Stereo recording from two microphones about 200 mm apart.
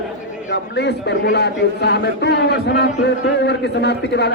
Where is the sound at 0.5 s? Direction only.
60° left (ahead or behind).